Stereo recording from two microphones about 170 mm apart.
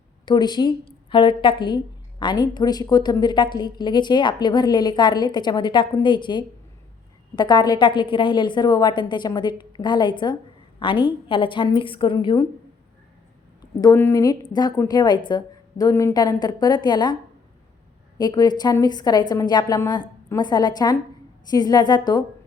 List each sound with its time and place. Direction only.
0.3 s a woman's voice: 25° left (ahead or behind)
13.8 s a woman's voice: 15° left (ahead or behind)
18.2 s a woman's voice: 25° left (ahead or behind)